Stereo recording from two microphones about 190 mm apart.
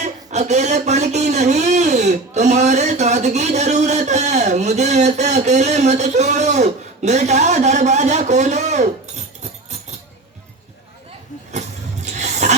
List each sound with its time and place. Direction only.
0.0 s a man's voice: 35° right (ahead or behind)
11.5 s vehicle: 35° right (ahead or behind)